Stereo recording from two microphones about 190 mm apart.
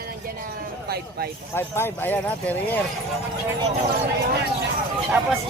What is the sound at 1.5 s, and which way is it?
Speech, 10° left (ahead or behind).